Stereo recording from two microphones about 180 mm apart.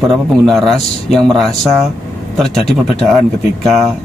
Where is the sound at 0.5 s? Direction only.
Centre (ahead or behind).